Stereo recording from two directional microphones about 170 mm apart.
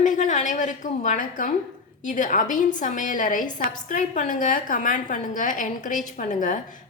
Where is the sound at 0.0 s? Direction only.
45° left (ahead or behind).